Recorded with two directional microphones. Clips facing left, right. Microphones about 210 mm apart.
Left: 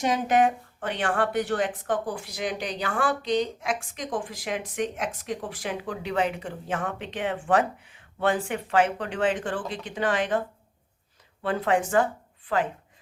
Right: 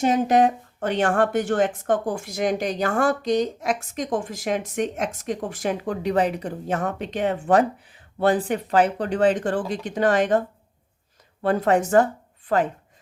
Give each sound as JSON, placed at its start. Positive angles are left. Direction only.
{"t": 0.3, "sound": "speech", "side_deg": -40}
{"t": 11.4, "sound": "speech", "side_deg": -45}